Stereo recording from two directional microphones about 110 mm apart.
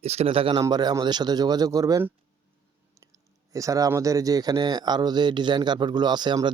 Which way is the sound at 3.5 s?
30° right (ahead or behind).